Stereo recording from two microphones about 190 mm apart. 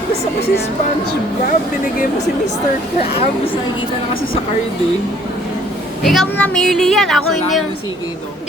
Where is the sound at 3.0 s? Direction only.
30° left (ahead or behind).